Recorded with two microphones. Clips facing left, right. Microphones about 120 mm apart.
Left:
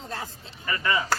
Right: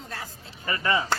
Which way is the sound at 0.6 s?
30° right (ahead or behind).